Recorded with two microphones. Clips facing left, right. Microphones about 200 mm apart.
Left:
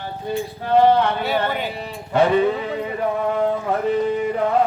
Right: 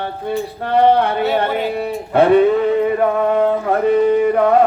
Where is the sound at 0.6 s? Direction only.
65° right (ahead or behind).